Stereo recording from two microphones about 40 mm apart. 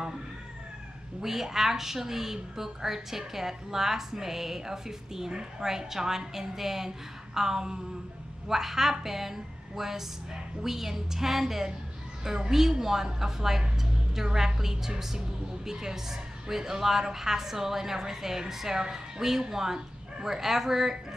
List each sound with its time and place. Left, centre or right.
1.2 s a woman's voice: centre